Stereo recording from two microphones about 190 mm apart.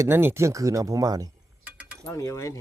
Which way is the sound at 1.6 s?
5° right (ahead or behind).